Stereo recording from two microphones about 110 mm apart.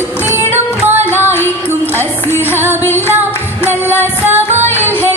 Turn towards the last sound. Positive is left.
turn(degrees=-20)  # may be behind; listen again after turning